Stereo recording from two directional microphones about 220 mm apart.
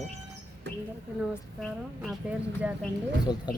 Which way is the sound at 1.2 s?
5° right (ahead or behind).